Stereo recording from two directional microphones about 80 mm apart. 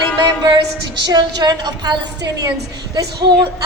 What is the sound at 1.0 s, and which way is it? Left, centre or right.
A woman's voice, right.